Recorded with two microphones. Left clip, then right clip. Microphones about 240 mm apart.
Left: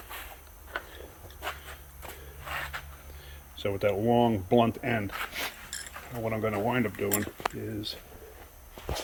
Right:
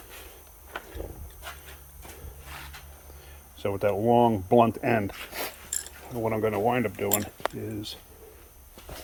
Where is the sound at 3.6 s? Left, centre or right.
Centre.